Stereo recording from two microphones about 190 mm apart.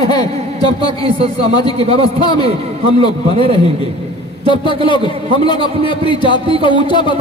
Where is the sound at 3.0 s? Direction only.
30° right (ahead or behind).